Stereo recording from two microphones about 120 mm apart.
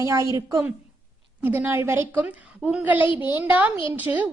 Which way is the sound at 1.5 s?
15° right (ahead or behind).